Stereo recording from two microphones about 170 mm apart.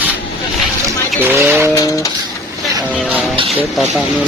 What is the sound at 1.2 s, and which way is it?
Speech, 15° right (ahead or behind).